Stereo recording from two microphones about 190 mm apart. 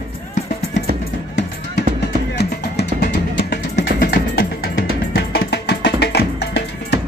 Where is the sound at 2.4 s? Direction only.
60° left (ahead or behind).